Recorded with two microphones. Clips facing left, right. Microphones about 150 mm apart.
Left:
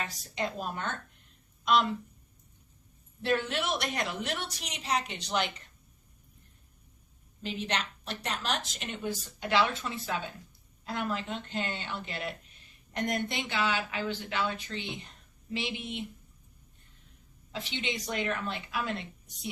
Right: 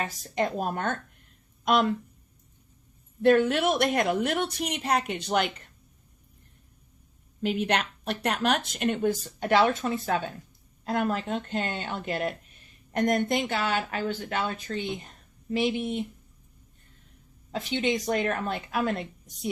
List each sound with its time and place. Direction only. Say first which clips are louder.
0.0 s a woman's voice: right 6 dB; 50° right (ahead or behind)
3.2 s a woman's voice: right 9 dB; 50° right (ahead or behind)
7.4 s a woman's voice: right 8 dB; 55° right (ahead or behind)
17.5 s a woman's voice: right 9 dB; 45° right (ahead or behind)